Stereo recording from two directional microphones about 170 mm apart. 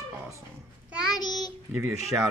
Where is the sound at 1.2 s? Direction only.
25° left (ahead or behind).